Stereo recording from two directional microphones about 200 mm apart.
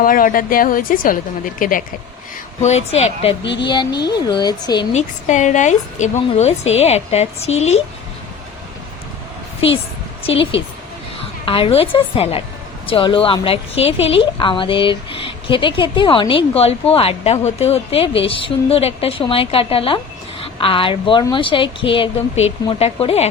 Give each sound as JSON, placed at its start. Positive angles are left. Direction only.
{"t": 0.0, "sound": "a woman's voice", "side_deg": 45}
{"t": 3.4, "sound": "speech", "side_deg": 60}
{"t": 3.7, "sound": "a woman's voice", "side_deg": 20}
{"t": 4.9, "sound": "a woman's voice", "side_deg": 35}
{"t": 10.2, "sound": "a woman's voice", "side_deg": 25}